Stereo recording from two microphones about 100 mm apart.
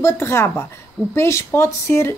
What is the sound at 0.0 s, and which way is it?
A woman's voice, 25° left (ahead or behind).